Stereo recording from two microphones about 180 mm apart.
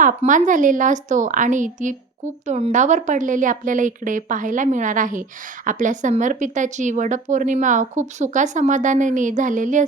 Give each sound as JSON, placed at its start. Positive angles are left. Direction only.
{"t": 0.0, "sound": "a woman's voice", "side_deg": -45}